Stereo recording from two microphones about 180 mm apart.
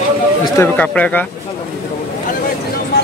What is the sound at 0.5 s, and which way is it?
Speech, 10° left (ahead or behind).